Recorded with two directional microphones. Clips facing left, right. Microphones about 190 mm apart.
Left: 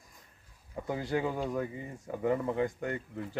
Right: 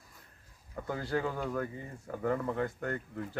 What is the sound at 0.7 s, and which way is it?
A man's voice, 15° left (ahead or behind).